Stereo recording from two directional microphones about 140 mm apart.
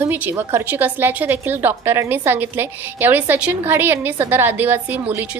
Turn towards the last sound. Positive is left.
turn(degrees=-15)  # may be behind; listen again after turning